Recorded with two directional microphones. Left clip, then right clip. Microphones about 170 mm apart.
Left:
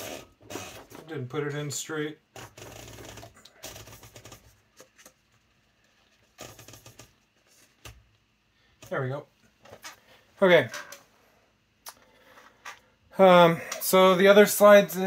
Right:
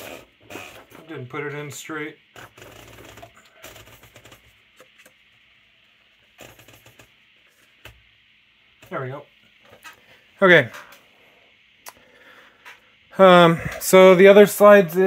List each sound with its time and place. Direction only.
0.5 s a sound: 15° right (ahead or behind)
10.4 s speech: 60° right (ahead or behind)
13.1 s speech: 55° right (ahead or behind); by 15.0 s 70° right (ahead or behind)